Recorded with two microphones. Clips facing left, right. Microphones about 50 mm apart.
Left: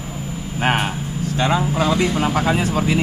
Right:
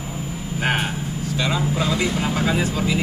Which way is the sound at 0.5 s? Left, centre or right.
Left.